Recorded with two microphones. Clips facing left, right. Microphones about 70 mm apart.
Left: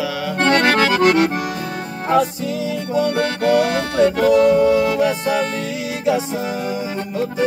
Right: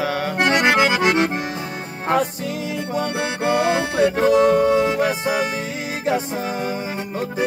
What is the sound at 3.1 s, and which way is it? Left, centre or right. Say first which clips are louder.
Music: left 3 dB; right.